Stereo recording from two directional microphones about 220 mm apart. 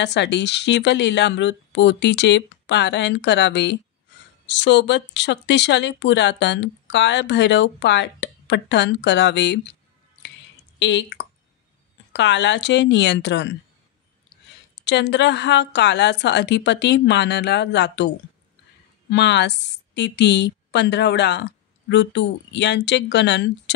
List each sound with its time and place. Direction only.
0.0 s speech: 50° left (ahead or behind)
10.8 s speech: 55° left (ahead or behind)
14.8 s speech: 50° left (ahead or behind)